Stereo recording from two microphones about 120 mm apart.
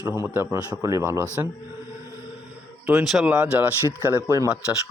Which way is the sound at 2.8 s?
10° right (ahead or behind).